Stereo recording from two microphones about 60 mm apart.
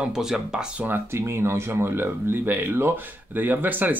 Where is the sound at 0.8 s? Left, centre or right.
Right.